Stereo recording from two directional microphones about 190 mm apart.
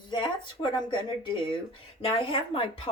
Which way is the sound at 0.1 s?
25° left (ahead or behind).